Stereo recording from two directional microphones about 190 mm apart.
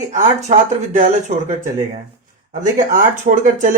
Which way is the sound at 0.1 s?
40° right (ahead or behind).